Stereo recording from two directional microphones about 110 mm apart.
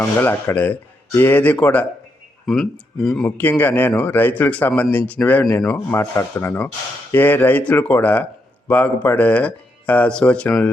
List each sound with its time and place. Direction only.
0.0 s a man's voice: 20° left (ahead or behind)
2.5 s speech: centre (ahead or behind)
3.2 s a man's voice: 15° left (ahead or behind)